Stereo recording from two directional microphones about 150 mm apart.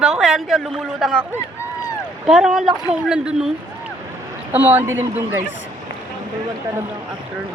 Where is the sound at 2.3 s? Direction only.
5° right (ahead or behind).